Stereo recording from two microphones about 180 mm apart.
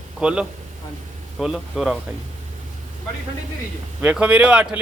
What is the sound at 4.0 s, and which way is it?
Speech, 5° right (ahead or behind).